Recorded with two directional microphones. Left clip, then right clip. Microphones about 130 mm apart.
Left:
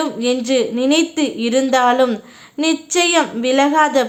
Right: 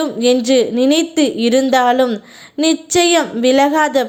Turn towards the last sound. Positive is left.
turn(degrees=-35)  # may be behind; listen again after turning